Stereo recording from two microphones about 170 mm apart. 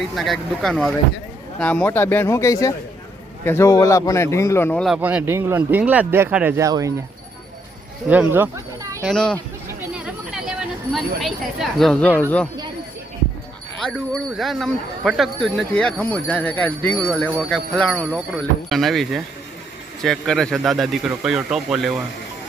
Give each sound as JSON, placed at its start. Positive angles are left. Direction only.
{"t": 0.2, "sound": "speech", "side_deg": 0}
{"t": 4.9, "sound": "speech", "side_deg": -10}
{"t": 8.1, "sound": "speech", "side_deg": -10}
{"t": 9.0, "sound": "speech", "side_deg": 5}
{"t": 9.9, "sound": "a sound", "side_deg": -5}
{"t": 10.9, "sound": "speech", "side_deg": 0}
{"t": 13.7, "sound": "speech", "side_deg": 5}